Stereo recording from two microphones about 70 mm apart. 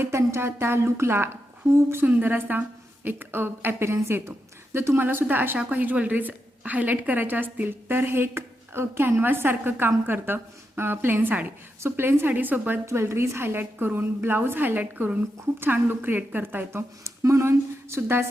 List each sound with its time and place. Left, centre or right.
0.0 s a woman's voice: right
2.0 s a woman's voice: right
12.8 s a woman's voice: right
17.0 s a woman's voice: right